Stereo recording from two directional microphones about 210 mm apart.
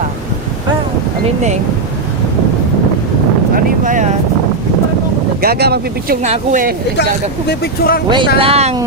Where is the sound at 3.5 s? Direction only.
40° right (ahead or behind).